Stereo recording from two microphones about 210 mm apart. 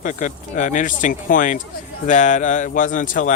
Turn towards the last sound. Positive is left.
turn(degrees=40)  # may be behind; listen again after turning